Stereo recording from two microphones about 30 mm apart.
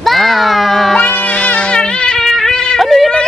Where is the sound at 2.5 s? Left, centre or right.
Left.